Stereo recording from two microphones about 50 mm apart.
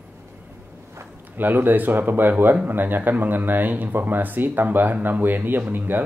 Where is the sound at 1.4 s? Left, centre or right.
Right.